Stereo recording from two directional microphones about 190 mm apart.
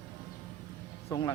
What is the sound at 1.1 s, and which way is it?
Speech, 20° left (ahead or behind).